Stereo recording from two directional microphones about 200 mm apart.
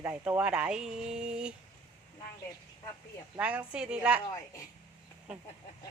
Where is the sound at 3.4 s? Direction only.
5° right (ahead or behind).